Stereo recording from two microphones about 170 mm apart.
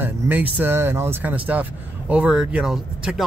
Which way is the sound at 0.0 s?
10° right (ahead or behind).